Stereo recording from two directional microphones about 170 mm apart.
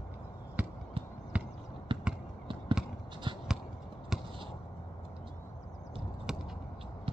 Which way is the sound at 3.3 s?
30° right (ahead or behind).